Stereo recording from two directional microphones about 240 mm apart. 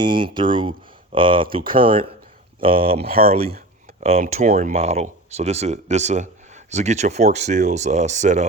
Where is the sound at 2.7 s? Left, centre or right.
Right.